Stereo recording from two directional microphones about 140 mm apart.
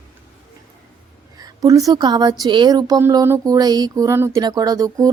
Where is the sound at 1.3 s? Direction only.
25° right (ahead or behind).